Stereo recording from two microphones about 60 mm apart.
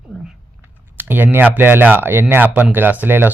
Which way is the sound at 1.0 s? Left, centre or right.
Right.